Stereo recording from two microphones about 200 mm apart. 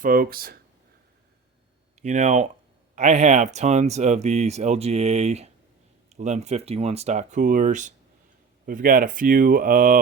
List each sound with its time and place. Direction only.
0.0 s speech: 45° right (ahead or behind)
2.0 s speech: 35° right (ahead or behind)